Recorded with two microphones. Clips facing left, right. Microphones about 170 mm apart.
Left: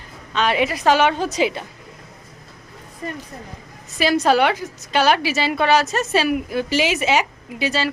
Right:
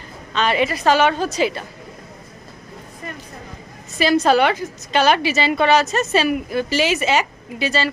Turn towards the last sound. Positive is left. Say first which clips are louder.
# right 1 dB
turn(degrees=10)  # may be behind; listen again after turning